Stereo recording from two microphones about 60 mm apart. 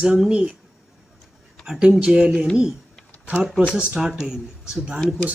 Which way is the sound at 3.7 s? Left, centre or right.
Centre.